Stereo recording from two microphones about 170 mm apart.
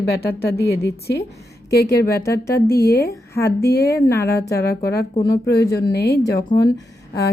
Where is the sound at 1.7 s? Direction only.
70° left (ahead or behind).